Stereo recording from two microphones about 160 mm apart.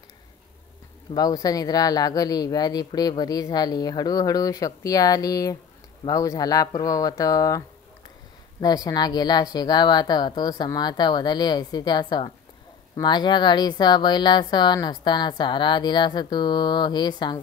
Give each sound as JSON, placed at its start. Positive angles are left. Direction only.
{"t": 1.1, "sound": "speech", "side_deg": 25}